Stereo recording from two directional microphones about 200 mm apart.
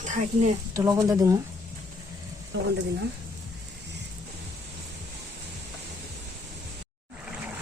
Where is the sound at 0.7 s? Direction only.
15° right (ahead or behind).